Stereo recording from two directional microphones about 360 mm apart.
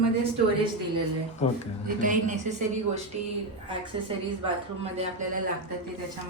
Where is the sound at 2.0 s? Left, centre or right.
Right.